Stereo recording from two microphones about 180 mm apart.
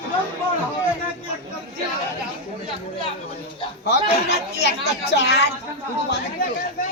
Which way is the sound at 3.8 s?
65° left (ahead or behind).